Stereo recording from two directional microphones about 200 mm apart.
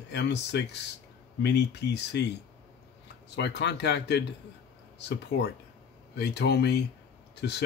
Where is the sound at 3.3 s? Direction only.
60° left (ahead or behind).